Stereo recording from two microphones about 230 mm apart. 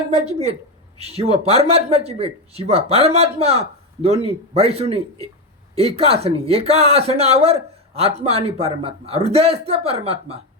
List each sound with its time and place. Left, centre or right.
0.1 s a man's voice: right